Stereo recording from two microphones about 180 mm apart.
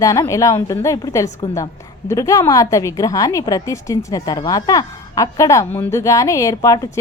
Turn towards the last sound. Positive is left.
turn(degrees=20)  # may be behind; listen again after turning